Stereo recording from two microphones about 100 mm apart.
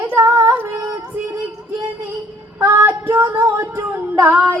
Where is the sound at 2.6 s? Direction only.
25° right (ahead or behind).